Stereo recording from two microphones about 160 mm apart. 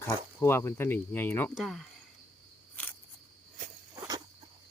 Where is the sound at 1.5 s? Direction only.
Centre (ahead or behind).